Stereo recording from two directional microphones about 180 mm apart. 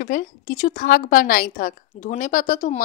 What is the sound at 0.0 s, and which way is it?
Speech, 50° left (ahead or behind).